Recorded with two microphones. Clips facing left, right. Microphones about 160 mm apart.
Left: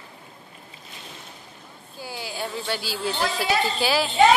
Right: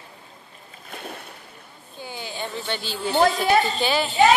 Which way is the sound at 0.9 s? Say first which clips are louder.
Right 9 dB; 55° right (ahead or behind).